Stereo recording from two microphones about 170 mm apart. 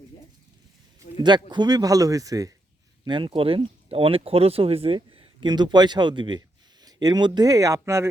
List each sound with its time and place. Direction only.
1.2 s speech: 25° right (ahead or behind)